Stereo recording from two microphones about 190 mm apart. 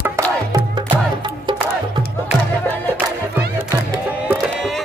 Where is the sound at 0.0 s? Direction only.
15° right (ahead or behind).